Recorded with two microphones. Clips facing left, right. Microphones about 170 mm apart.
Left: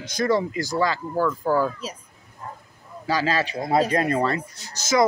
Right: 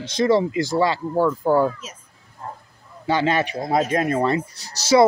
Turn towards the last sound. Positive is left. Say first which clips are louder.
# right 5 dB
turn(degrees=-35)  # may be behind; listen again after turning